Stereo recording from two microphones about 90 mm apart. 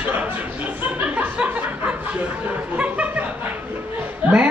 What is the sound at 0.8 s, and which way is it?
Speech, 20° right (ahead or behind).